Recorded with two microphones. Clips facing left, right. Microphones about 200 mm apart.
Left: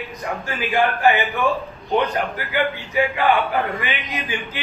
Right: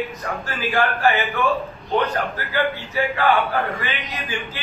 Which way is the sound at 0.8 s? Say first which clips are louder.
Left 3 dB; 15° left (ahead or behind).